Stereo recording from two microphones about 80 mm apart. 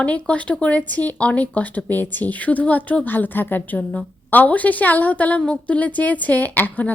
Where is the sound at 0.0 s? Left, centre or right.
Centre.